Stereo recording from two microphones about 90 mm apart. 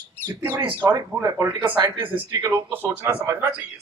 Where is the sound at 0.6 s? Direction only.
65° right (ahead or behind).